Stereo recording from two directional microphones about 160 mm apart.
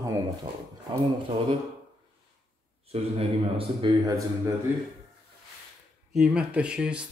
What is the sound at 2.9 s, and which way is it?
Speech, 40° right (ahead or behind).